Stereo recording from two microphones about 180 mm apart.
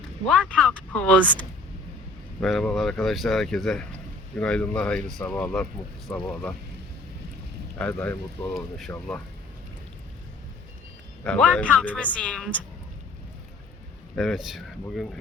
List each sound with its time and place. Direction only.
0.3 s speech: 5° left (ahead or behind)
7.8 s speech: 5° left (ahead or behind)
11.2 s speech: 5° left (ahead or behind)
14.2 s speech: centre (ahead or behind)